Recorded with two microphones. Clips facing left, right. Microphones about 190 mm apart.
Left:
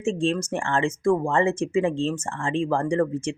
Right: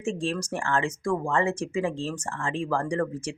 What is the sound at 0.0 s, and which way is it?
Speech, 25° left (ahead or behind).